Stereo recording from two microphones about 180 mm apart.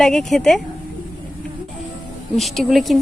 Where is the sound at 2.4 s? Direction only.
Centre (ahead or behind).